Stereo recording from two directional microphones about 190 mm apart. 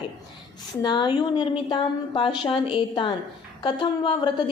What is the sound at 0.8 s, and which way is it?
A woman's voice, 25° left (ahead or behind).